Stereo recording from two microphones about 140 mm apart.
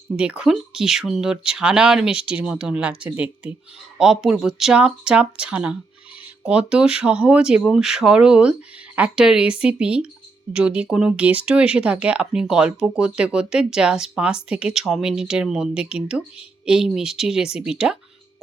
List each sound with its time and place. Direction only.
0.2 s speech: 5° right (ahead or behind)